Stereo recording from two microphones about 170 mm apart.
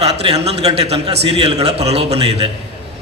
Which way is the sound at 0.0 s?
35° right (ahead or behind).